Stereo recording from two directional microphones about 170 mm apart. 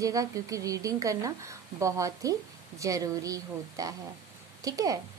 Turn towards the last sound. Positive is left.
turn(degrees=-20)  # may be behind; listen again after turning